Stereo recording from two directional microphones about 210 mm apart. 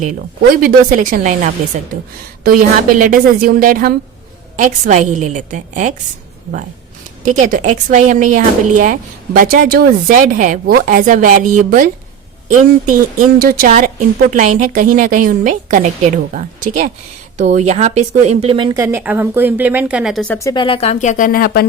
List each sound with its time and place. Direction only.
0.5 s speech: 40° right (ahead or behind)
7.3 s speech: 35° right (ahead or behind); by 21.7 s 45° left (ahead or behind)